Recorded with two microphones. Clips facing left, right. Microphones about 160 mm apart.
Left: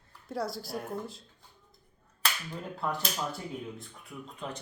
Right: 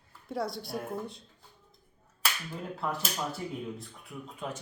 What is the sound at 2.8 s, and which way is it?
Speech, centre (ahead or behind).